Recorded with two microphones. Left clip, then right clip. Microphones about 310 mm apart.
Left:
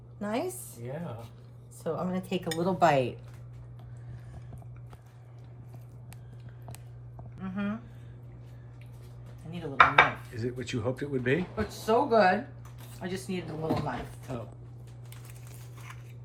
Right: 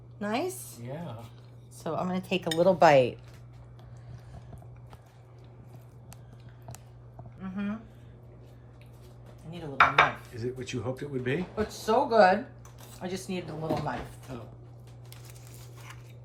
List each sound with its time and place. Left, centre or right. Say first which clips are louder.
0.2 s speech: right 1 dB; centre
0.4 s speech: right 1 dB; centre
1.8 s a woman's voice: right 1 dB; centre
7.3 s a sound: left 1 dB; centre
9.5 s dishes: left 1 dB; centre
10.4 s speech: left 1 dB; centre